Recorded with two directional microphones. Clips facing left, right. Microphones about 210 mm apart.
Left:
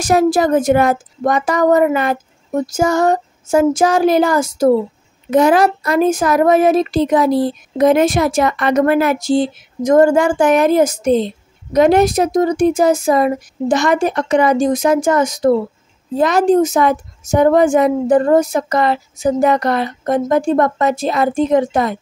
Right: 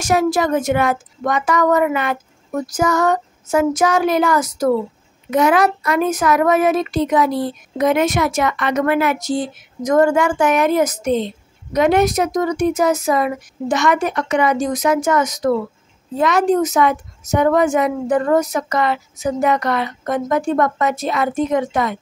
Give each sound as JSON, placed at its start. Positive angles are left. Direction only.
{"t": 0.0, "sound": "speech", "side_deg": 35}